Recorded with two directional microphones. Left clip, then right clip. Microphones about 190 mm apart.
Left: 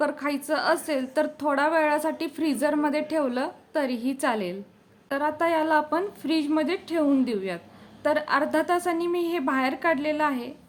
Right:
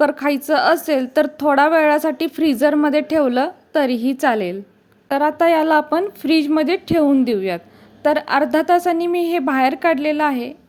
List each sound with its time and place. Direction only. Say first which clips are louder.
0.0 s a woman's voice: right 10 dB; 35° right (ahead or behind)